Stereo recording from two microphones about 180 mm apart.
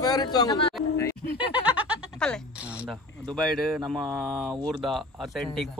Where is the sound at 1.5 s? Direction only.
5° right (ahead or behind).